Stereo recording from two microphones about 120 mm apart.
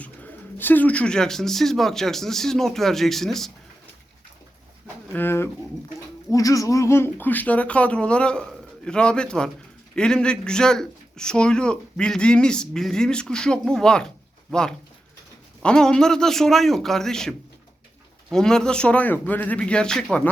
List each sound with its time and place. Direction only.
0.0 s speech: 15° left (ahead or behind)
5.1 s speech: 20° left (ahead or behind)